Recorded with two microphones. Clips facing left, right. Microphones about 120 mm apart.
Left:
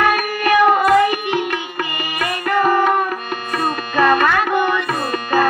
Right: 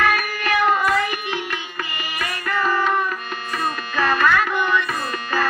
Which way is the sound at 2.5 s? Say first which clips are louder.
Left 5 dB; 55° left (ahead or behind).